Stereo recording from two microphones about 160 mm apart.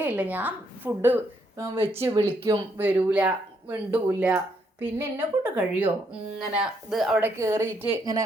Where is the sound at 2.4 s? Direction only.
30° right (ahead or behind).